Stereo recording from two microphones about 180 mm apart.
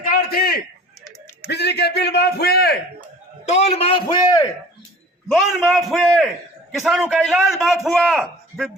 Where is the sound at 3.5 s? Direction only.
35° left (ahead or behind).